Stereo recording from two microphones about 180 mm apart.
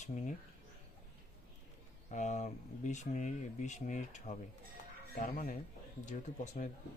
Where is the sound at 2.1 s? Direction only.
40° left (ahead or behind).